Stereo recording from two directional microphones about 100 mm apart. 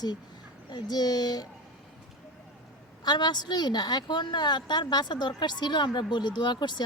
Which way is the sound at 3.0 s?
45° left (ahead or behind).